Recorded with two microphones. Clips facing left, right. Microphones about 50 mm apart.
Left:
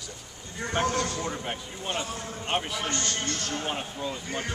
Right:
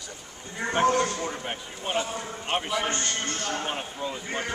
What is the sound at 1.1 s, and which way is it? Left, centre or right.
Speech, centre.